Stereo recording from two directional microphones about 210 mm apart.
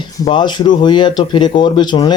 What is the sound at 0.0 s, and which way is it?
Speech, 20° left (ahead or behind).